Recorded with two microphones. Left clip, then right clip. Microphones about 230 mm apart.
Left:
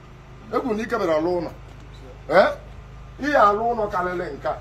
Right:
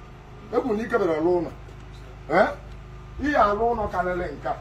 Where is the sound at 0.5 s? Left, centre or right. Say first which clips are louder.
Even; centre.